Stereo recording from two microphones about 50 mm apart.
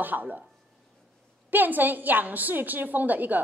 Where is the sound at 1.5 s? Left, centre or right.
Right.